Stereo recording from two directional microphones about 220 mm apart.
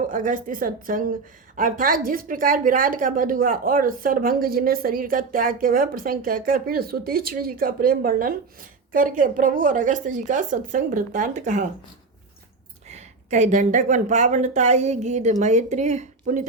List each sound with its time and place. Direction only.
0.1 s a woman's voice: 35° right (ahead or behind)
12.9 s a woman's voice: 30° right (ahead or behind)